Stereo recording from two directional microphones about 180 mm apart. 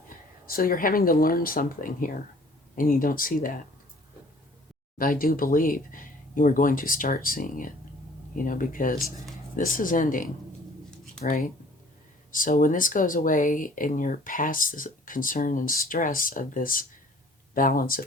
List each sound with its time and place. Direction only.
0.4 s speech: 55° left (ahead or behind)
4.9 s speech: 50° left (ahead or behind)